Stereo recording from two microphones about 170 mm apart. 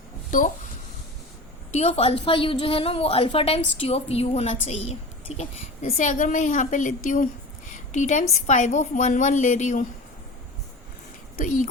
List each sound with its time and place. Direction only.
0.3 s a woman's voice: 50° left (ahead or behind)
1.7 s a woman's voice: 40° left (ahead or behind)
11.3 s a woman's voice: 50° left (ahead or behind)